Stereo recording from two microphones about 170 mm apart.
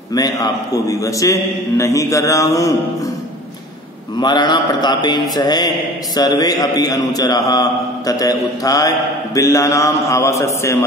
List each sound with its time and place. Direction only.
0.1 s a man's voice: 20° left (ahead or behind)
4.2 s a man's voice: 25° left (ahead or behind)